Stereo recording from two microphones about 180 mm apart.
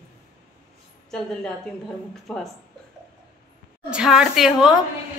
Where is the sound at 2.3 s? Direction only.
Centre (ahead or behind).